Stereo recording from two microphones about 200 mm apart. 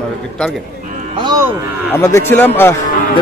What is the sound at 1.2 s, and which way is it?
Speech, 20° right (ahead or behind).